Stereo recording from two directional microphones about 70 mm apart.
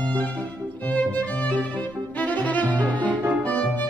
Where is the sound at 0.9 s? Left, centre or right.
Left.